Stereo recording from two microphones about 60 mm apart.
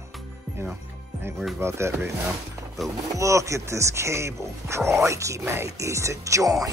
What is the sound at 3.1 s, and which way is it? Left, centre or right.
Speech, right.